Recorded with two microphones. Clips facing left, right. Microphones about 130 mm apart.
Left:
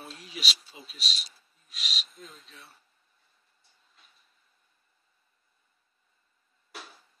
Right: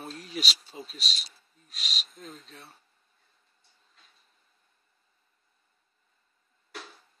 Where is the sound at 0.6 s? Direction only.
45° right (ahead or behind).